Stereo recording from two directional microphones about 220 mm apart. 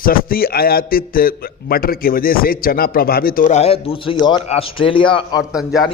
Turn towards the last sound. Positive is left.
turn(degrees=0)  # may be behind; listen again after turning